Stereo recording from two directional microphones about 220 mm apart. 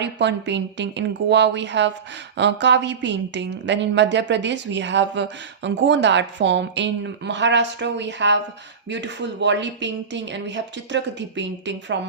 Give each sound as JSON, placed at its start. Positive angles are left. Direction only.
{"t": 0.0, "sound": "speech", "side_deg": -50}